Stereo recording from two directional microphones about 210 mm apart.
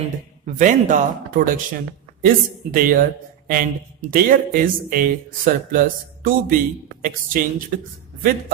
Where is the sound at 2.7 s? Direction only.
40° right (ahead or behind).